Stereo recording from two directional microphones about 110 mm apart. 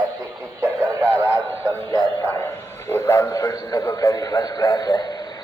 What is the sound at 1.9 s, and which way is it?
Speech, 40° left (ahead or behind).